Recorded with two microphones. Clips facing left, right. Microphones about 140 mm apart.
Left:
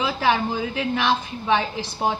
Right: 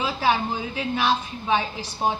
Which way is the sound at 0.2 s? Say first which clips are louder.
Left 1 dB; 65° left (ahead or behind).